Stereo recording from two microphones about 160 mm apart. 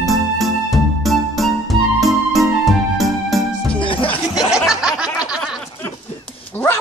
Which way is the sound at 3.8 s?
35° left (ahead or behind).